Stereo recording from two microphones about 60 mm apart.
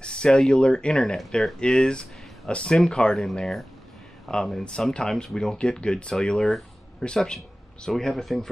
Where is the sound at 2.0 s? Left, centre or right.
Centre.